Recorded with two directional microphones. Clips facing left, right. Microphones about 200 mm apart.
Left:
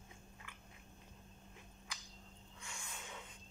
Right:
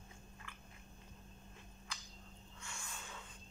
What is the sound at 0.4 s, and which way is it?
Biting, 20° left (ahead or behind).